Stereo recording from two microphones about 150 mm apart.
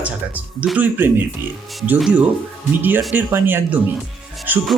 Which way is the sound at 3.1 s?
15° right (ahead or behind).